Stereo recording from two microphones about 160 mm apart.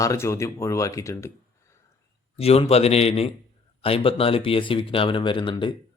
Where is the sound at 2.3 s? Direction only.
40° left (ahead or behind).